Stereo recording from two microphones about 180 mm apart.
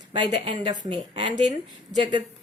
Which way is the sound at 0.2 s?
25° right (ahead or behind).